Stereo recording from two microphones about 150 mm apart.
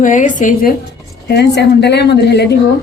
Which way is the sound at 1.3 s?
90° left.